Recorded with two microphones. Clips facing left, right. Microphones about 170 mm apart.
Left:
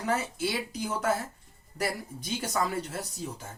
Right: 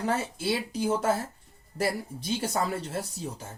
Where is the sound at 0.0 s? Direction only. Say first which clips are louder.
Right 1 dB; 30° right (ahead or behind).